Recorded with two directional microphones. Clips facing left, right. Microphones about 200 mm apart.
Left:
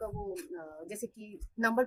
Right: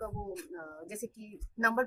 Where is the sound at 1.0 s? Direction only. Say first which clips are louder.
Left 1 dB; 35° left (ahead or behind).